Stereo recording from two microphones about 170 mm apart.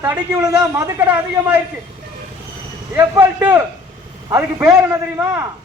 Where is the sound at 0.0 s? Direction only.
10° right (ahead or behind).